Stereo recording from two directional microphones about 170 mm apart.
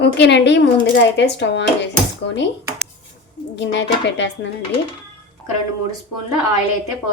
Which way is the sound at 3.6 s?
90° left.